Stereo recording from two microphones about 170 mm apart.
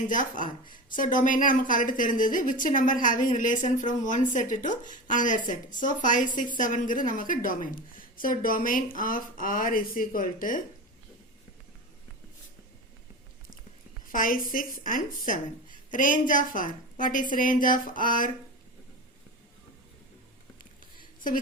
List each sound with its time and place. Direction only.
0.1 s a woman's voice: 50° left (ahead or behind)
14.1 s a woman's voice: 55° left (ahead or behind)
21.0 s a sound: 50° left (ahead or behind)